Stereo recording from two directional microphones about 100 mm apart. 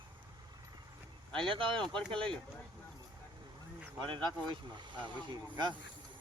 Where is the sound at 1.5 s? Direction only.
60° right (ahead or behind).